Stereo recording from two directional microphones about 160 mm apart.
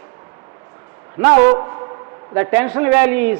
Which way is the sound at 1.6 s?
25° right (ahead or behind).